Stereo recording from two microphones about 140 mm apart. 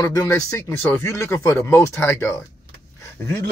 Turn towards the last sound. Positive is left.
turn(degrees=15)  # may be behind; listen again after turning